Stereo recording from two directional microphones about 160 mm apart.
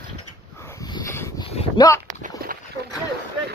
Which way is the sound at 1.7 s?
20° left (ahead or behind).